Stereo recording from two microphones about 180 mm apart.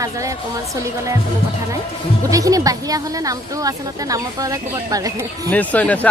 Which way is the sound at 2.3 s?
20° right (ahead or behind).